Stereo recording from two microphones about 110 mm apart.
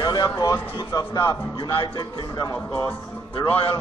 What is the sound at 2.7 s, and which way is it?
Speech, 15° left (ahead or behind).